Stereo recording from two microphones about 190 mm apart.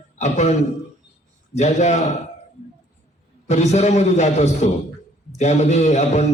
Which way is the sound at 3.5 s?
35° left (ahead or behind).